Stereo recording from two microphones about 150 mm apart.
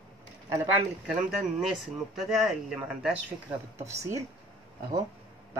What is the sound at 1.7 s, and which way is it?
A man's voice, centre (ahead or behind).